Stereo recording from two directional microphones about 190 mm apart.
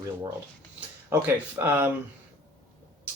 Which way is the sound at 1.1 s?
10° right (ahead or behind).